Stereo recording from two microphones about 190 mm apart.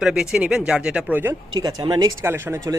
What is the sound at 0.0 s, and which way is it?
Speech, 5° right (ahead or behind).